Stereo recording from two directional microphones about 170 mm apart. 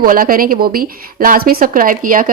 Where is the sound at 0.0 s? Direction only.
60° right (ahead or behind).